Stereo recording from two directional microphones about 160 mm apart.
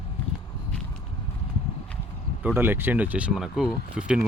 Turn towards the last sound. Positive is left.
turn(degrees=-5)  # may be behind; listen again after turning